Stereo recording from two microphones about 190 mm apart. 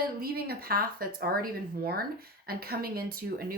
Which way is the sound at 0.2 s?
55° right (ahead or behind).